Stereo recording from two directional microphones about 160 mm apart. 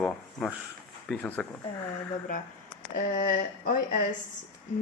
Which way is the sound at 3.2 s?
60° left (ahead or behind).